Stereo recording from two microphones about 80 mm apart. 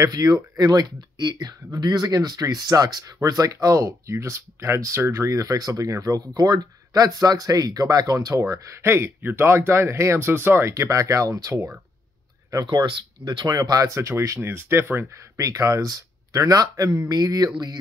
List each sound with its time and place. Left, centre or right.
0.1 s speech: right
1.1 s speech: right
1.7 s speech: right
8.4 s speech: right
12.6 s speech: right
13.5 s speech: right
15.4 s speech: right